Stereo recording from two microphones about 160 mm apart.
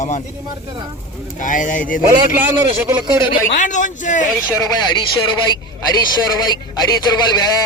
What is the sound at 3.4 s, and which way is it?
Speech, 50° left (ahead or behind).